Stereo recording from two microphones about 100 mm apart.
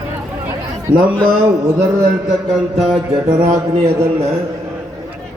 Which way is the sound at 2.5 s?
5° right (ahead or behind).